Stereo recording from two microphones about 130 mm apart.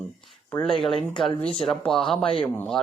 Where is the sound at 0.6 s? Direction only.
5° left (ahead or behind).